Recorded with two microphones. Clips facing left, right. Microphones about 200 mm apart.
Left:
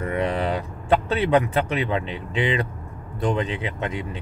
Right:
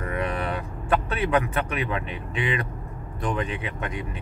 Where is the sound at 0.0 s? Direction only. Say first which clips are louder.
Left 4 dB; 30° left (ahead or behind).